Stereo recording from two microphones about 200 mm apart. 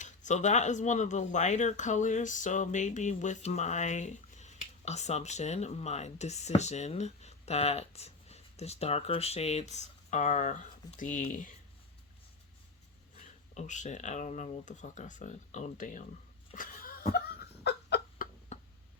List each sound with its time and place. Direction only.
0.0 s speech: 35° left (ahead or behind)
13.5 s speech: 35° left (ahead or behind)
16.6 s a sound: 45° left (ahead or behind)
18.5 s tick-tock: 35° left (ahead or behind)